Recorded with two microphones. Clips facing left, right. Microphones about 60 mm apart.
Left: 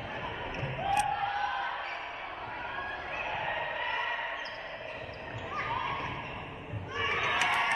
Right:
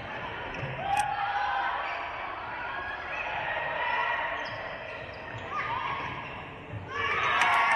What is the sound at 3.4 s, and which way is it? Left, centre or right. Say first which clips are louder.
Honk: right 3 dB; right.